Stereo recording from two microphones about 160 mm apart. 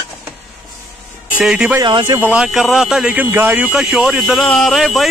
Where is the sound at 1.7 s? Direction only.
30° right (ahead or behind).